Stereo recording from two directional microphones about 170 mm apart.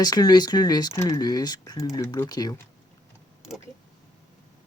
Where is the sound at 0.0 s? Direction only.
25° left (ahead or behind).